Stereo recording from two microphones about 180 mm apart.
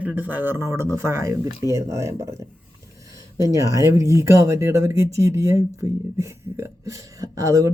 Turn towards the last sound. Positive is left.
turn(degrees=-20)  # may be behind; listen again after turning